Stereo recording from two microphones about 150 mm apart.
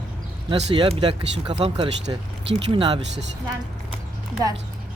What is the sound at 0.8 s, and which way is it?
Speech, 35° right (ahead or behind).